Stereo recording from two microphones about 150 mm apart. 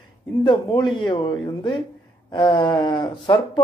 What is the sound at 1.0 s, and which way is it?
Speech, 30° left (ahead or behind).